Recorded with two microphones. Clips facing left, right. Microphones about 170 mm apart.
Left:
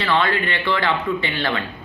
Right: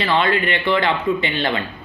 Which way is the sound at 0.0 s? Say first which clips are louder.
Right 2 dB; 20° right (ahead or behind).